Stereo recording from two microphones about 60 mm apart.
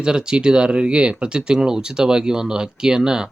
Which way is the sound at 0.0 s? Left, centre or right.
Centre.